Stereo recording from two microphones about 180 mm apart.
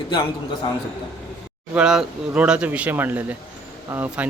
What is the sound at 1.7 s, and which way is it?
Speech, 5° right (ahead or behind).